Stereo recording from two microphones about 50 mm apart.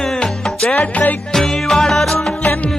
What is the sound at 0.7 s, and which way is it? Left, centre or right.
Music, left.